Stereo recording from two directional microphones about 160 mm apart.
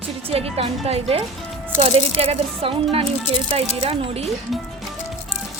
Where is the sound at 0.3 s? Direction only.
40° right (ahead or behind).